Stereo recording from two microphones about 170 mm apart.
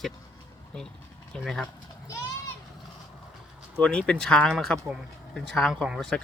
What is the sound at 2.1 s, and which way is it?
Children playing, 20° left (ahead or behind).